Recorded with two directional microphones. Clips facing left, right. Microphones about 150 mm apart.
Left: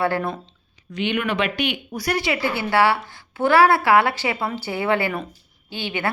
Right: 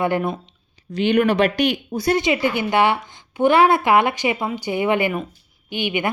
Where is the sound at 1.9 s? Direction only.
25° right (ahead or behind).